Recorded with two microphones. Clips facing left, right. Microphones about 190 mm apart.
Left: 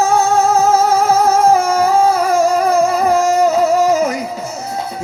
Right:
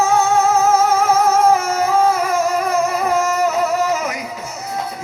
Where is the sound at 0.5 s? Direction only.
30° left (ahead or behind).